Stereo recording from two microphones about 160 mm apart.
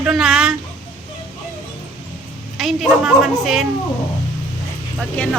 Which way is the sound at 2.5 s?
Centre (ahead or behind).